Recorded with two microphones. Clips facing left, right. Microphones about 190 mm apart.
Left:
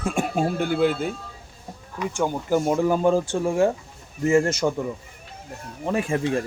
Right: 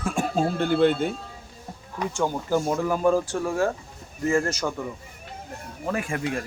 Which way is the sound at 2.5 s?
25° left (ahead or behind).